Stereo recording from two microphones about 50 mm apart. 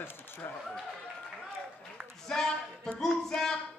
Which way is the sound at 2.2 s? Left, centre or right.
Centre.